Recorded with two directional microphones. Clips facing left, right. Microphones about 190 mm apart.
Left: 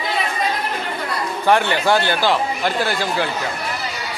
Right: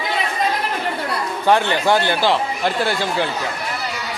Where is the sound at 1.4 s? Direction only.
15° right (ahead or behind).